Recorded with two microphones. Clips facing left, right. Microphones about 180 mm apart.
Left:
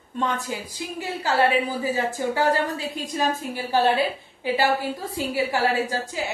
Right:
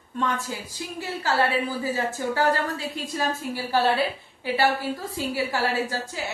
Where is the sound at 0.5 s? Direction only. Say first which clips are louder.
Left 2 dB; 20° left (ahead or behind).